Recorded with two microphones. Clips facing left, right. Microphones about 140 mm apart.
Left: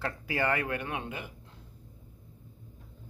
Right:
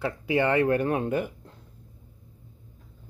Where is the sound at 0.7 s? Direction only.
40° right (ahead or behind).